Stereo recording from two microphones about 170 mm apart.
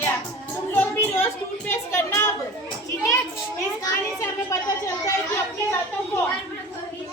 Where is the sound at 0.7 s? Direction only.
15° left (ahead or behind).